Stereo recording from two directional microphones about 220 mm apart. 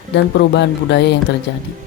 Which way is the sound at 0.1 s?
50° left (ahead or behind).